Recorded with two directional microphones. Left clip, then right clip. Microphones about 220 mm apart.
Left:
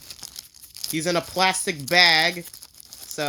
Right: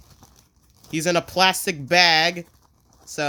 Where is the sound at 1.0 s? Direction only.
10° right (ahead or behind).